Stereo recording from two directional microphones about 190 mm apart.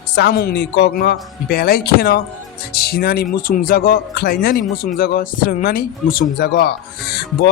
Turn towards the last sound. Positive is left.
turn(degrees=55)  # may be behind; listen again after turning